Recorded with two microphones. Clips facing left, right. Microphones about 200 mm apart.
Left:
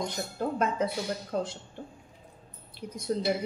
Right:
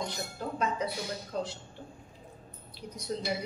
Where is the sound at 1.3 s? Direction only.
50° left (ahead or behind).